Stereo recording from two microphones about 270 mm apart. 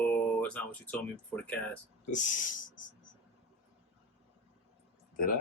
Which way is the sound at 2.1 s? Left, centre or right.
Left.